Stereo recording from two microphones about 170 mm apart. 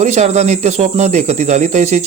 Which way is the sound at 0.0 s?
40° right (ahead or behind).